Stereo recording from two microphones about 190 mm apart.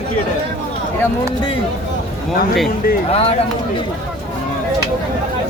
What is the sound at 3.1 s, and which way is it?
Speech, 30° left (ahead or behind).